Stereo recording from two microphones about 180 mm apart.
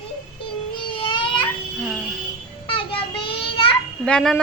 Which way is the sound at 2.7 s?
30° left (ahead or behind).